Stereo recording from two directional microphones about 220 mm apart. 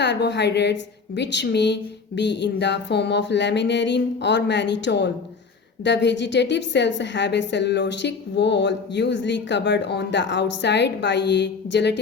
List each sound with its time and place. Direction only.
0.0 s a woman's voice: 50° left (ahead or behind)